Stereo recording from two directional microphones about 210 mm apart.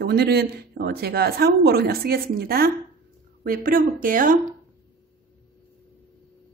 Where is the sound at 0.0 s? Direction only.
50° right (ahead or behind).